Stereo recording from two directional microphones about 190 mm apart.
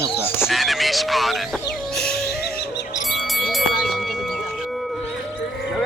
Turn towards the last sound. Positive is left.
turn(degrees=0)  # may be behind; listen again after turning